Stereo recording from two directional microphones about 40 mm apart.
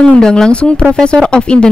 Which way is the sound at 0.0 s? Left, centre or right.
Left.